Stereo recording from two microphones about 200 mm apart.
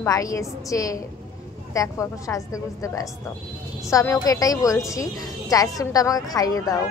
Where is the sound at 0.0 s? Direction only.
15° left (ahead or behind).